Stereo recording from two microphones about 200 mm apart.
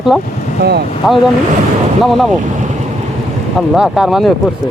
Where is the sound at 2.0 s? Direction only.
Centre (ahead or behind).